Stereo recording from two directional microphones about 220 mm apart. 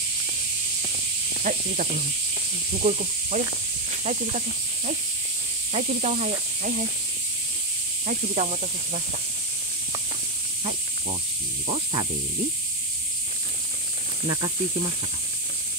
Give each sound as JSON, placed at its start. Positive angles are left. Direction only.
{"t": 1.4, "sound": "speech", "side_deg": -35}
{"t": 5.7, "sound": "speech", "side_deg": -30}
{"t": 8.1, "sound": "speech", "side_deg": -35}
{"t": 10.6, "sound": "snake", "side_deg": -25}
{"t": 11.6, "sound": "speech", "side_deg": -25}
{"t": 14.2, "sound": "speech", "side_deg": -25}